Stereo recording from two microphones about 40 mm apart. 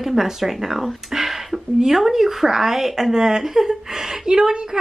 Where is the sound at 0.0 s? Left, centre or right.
Centre.